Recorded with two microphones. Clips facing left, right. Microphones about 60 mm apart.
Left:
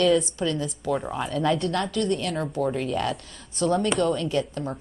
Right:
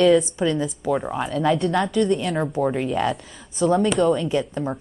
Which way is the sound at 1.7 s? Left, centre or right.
Centre.